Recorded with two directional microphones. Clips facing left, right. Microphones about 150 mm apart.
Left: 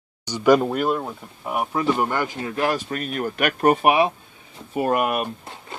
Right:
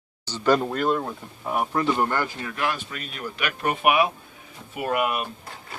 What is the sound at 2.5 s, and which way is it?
Speech, 35° left (ahead or behind).